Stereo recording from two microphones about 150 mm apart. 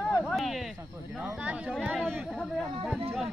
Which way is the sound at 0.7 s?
10° right (ahead or behind).